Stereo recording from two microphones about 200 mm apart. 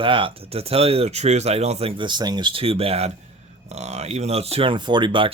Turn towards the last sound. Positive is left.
turn(degrees=-25)  # may be behind; listen again after turning